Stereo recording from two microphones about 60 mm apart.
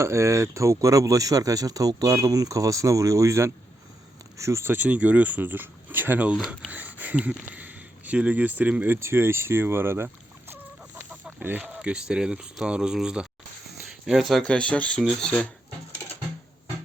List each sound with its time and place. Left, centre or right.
0.0 s speech: right
4.7 s speech: right
6.7 s a sound: right
7.2 s speech: centre
9.0 s speech: right
10.5 s chicken: right
11.8 s speech: centre
14.4 s speech: centre